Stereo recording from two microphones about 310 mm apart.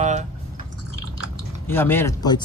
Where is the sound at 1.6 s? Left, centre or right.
Centre.